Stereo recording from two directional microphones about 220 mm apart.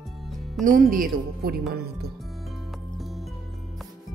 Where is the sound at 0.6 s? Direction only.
40° right (ahead or behind).